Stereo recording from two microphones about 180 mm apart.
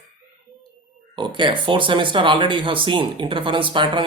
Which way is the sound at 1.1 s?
25° right (ahead or behind).